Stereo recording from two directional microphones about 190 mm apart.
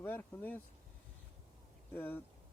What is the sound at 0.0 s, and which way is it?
Speech, 10° left (ahead or behind).